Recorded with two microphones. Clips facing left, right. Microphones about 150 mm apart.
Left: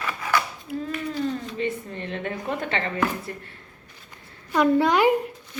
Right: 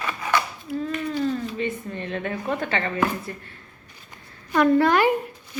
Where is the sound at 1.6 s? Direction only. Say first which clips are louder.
Even; 30° left (ahead or behind).